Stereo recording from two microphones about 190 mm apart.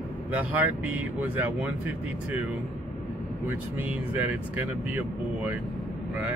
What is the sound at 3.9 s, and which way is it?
Speech, 10° right (ahead or behind).